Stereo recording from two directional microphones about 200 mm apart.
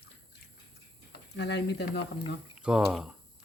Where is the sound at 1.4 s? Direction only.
55° left (ahead or behind).